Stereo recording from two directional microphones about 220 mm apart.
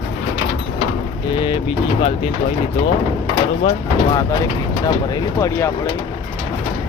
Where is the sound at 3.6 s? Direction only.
25° left (ahead or behind).